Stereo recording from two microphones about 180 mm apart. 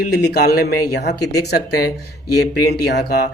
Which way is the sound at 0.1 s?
65° left (ahead or behind).